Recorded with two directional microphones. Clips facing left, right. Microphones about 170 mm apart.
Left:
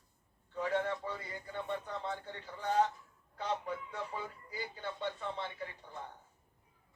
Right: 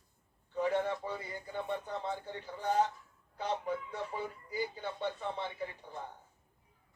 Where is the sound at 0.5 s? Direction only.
20° right (ahead or behind).